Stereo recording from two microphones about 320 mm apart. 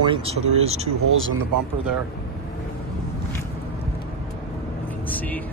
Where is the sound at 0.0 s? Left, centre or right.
Centre.